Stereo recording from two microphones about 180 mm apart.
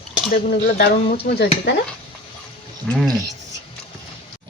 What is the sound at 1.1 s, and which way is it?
Speech, 60° left (ahead or behind).